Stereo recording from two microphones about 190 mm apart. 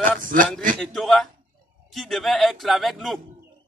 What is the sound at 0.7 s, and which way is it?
A man's voice, centre (ahead or behind).